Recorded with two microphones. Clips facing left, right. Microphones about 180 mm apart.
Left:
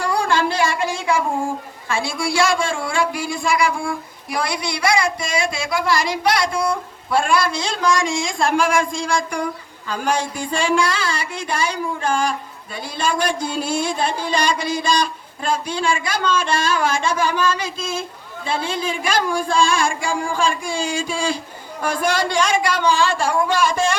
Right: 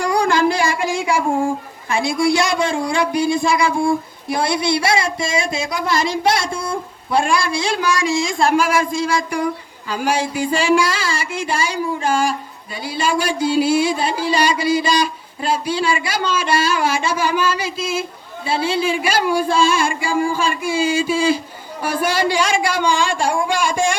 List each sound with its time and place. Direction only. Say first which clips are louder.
0.0 s a sound: right 3 dB; 15° right (ahead or behind)
1.9 s child singing: right 6 dB; 20° right (ahead or behind)
7.1 s speech: right 1 dB; 15° right (ahead or behind)